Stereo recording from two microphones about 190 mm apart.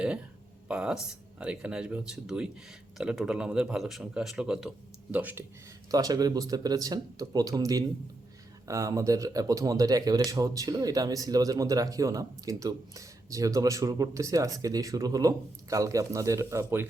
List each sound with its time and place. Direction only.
0.7 s speech: 5° right (ahead or behind)